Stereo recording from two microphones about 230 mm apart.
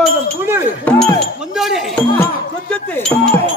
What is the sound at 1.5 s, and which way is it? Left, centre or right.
Speech, centre.